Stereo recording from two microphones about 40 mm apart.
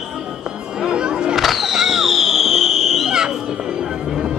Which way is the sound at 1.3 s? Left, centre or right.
Centre.